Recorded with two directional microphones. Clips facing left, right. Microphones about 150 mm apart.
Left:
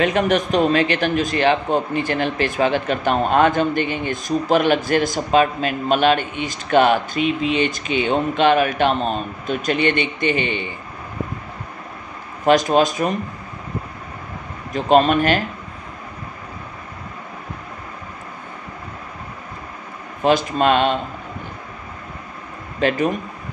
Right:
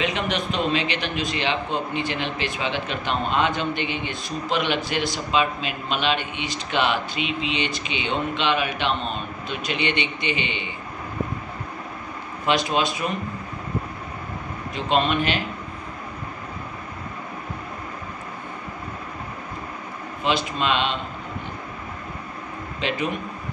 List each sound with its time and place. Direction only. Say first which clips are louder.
0.0 s a man's voice: left 8 dB; 45° left (ahead or behind)
12.4 s a man's voice: left 7 dB; 45° left (ahead or behind)
14.7 s a man's voice: left 7 dB; 45° left (ahead or behind)
20.2 s a man's voice: left 7 dB; 45° left (ahead or behind)
22.8 s a man's voice: left 8 dB; 45° left (ahead or behind)